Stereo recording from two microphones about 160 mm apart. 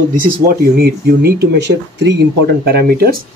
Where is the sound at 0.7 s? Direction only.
75° right (ahead or behind).